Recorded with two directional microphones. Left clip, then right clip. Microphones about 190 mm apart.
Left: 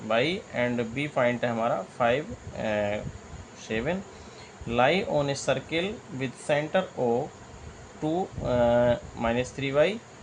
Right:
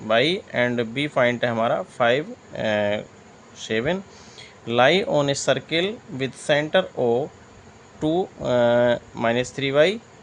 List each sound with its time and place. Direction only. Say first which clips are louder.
0.1 s speech: right 6 dB; 60° right (ahead or behind)